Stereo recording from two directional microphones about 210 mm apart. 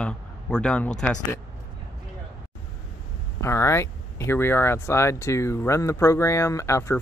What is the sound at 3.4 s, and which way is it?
Speech, 15° left (ahead or behind).